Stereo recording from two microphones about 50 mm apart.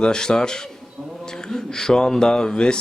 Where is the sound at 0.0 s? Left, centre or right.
Centre.